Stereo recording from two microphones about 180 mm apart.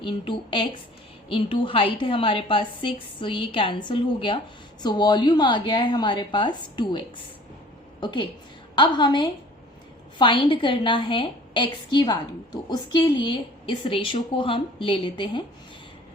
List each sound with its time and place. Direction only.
0.0 s a woman's voice: 30° left (ahead or behind)
8.0 s a woman's voice: 25° left (ahead or behind)